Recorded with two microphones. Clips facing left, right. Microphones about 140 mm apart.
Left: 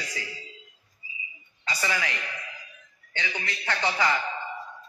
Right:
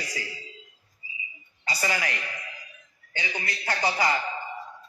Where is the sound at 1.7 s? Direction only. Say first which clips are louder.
Right 1 dB; 40° right (ahead or behind).